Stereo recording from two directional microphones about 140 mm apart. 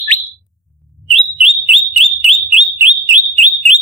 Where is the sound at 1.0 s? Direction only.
Centre (ahead or behind).